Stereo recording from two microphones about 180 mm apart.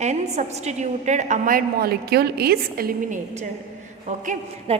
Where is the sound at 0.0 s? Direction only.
40° right (ahead or behind); by 3.2 s 55° right (ahead or behind).